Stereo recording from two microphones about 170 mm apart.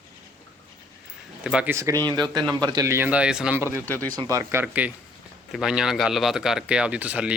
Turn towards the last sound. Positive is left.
turn(degrees=-10)  # may be behind; listen again after turning